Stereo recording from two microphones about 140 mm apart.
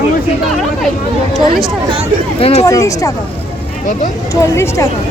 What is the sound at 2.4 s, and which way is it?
Speech, 50° left (ahead or behind).